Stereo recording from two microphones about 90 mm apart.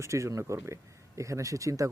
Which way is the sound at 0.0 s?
35° right (ahead or behind).